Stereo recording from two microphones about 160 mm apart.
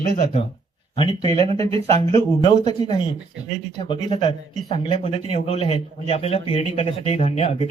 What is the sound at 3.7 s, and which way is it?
Speech, 30° left (ahead or behind).